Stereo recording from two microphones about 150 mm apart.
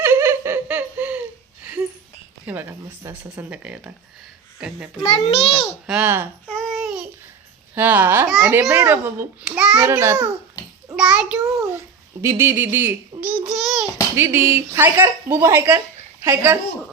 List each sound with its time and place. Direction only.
0.0 s laughter: 15° right (ahead or behind)
2.5 s a child's voice: 15° right (ahead or behind)
5.0 s a child's voice: 40° left (ahead or behind)
5.8 s a child's voice: 10° right (ahead or behind)
6.5 s babbling: centre (ahead or behind)
7.8 s a child's voice: 10° right (ahead or behind)
9.9 s a child's voice: 20° right (ahead or behind)
10.9 s a child's voice: 5° right (ahead or behind)
12.2 s a child's voice: 20° right (ahead or behind); by 13.9 s centre (ahead or behind)
14.2 s a child's voice: 15° right (ahead or behind)